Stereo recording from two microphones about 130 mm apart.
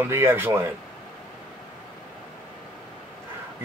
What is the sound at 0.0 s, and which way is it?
Speech, 20° right (ahead or behind).